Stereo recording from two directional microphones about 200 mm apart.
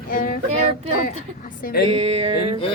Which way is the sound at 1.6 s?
45° left (ahead or behind).